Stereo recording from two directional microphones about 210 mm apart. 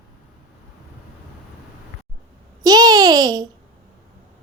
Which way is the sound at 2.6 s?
20° right (ahead or behind).